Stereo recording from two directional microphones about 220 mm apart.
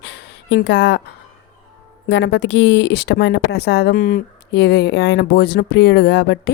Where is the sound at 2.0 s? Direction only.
55° left (ahead or behind).